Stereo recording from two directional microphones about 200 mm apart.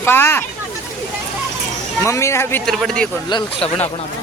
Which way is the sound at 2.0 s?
15° left (ahead or behind).